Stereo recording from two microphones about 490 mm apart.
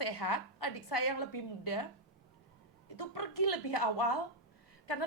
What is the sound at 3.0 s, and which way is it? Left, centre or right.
A woman's voice, left.